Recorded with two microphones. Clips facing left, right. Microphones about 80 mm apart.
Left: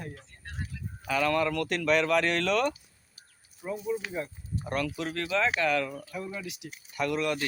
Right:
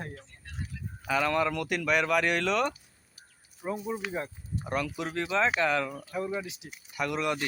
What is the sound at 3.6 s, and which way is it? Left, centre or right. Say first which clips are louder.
Speech: left 1 dB; right.